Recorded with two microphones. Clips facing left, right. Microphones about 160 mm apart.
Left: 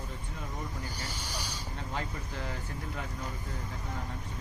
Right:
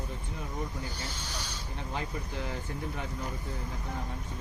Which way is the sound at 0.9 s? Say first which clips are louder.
Even; 10° left (ahead or behind).